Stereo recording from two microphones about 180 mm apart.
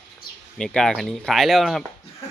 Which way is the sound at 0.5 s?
5° left (ahead or behind).